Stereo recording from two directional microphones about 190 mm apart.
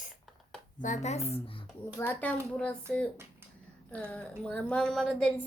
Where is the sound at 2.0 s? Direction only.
10° left (ahead or behind).